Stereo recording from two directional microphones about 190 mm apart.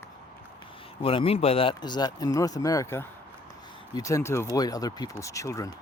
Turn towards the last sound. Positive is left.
turn(degrees=15)  # may be behind; listen again after turning